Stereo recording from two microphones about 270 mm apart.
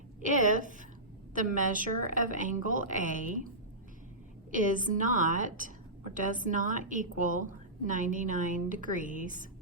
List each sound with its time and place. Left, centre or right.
0.3 s a woman's voice: right
4.5 s a woman's voice: right